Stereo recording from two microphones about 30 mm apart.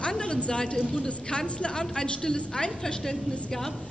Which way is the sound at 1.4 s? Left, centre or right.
Left.